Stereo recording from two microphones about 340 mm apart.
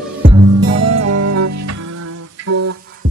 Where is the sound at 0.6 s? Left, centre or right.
Right.